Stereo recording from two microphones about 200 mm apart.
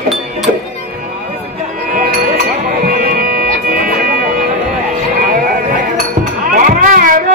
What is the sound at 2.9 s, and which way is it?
Music, 45° right (ahead or behind).